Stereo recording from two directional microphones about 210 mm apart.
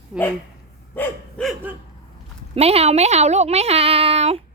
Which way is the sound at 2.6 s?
30° right (ahead or behind).